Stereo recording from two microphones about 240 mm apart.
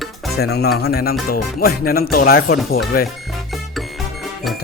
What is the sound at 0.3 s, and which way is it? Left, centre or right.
Speech, left.